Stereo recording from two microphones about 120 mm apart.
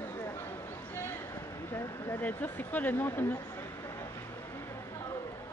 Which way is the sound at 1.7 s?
20° left (ahead or behind).